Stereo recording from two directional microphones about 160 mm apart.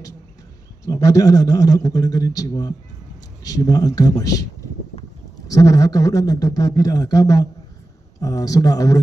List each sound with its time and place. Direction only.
0.8 s a man's voice: 20° left (ahead or behind)
5.5 s a man's voice: 20° left (ahead or behind)